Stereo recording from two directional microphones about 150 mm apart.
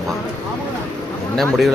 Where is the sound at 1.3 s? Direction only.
Centre (ahead or behind).